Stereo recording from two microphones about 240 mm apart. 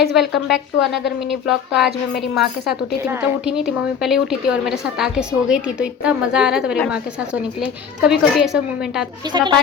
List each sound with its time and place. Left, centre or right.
0.2 s a woman's voice: centre
9.2 s a woman's voice: centre